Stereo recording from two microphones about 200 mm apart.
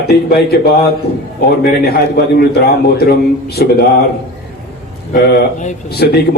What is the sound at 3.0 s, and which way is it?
Speech, 50° left (ahead or behind).